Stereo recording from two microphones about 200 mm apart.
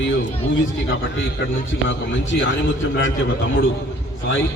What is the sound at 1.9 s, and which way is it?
A man's voice, 65° left (ahead or behind).